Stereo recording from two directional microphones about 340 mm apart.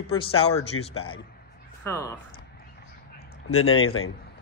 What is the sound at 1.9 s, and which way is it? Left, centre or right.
Speech, centre.